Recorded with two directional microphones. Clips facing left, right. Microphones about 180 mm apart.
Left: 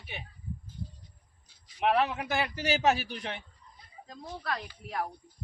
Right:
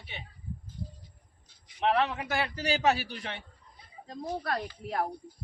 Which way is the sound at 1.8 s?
10° left (ahead or behind).